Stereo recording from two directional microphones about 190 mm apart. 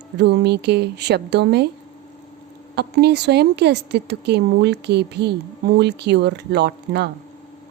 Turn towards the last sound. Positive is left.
turn(degrees=-60)  # may be behind; listen again after turning